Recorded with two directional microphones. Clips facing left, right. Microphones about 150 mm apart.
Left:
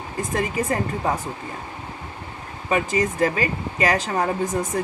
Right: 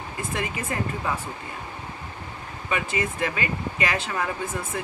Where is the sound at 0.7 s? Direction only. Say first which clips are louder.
Left 5 dB; 40° left (ahead or behind).